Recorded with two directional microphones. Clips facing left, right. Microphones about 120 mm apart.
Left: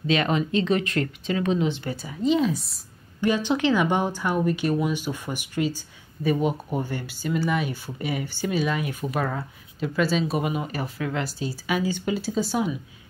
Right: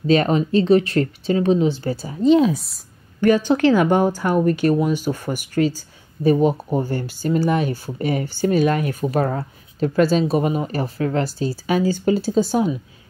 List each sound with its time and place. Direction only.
0.0 s speech: 40° right (ahead or behind)